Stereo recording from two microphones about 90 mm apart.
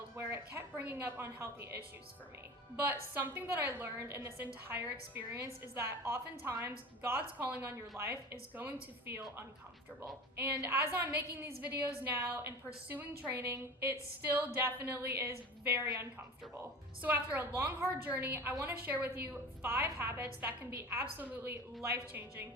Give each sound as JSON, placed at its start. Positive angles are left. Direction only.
{"t": 0.2, "sound": "a sound", "side_deg": -25}
{"t": 0.8, "sound": "a woman's voice", "side_deg": -20}
{"t": 3.2, "sound": "a woman's voice", "side_deg": -20}
{"t": 7.2, "sound": "speech", "side_deg": -15}
{"t": 8.0, "sound": "a woman's voice", "side_deg": -30}
{"t": 10.3, "sound": "a woman's voice", "side_deg": -20}